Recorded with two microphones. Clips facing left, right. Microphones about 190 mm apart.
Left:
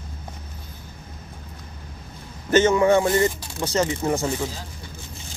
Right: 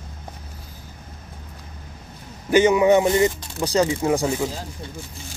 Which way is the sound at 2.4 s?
15° right (ahead or behind).